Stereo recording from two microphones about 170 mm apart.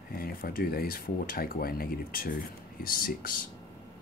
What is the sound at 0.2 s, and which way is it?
Speech, 60° left (ahead or behind).